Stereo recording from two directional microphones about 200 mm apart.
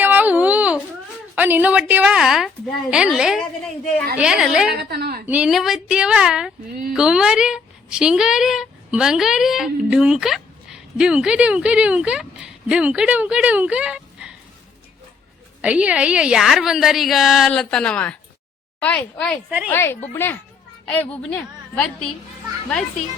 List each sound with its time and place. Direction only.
0.0 s baby cry: 10° right (ahead or behind)
1.4 s a woman's voice: 10° right (ahead or behind)
4.7 s a woman's voice: 50° right (ahead or behind)
5.2 s a woman's voice: 5° right (ahead or behind)
15.6 s a woman's voice: 5° right (ahead or behind)
19.5 s a woman's voice: 5° right (ahead or behind)
19.7 s a woman's voice: 10° left (ahead or behind)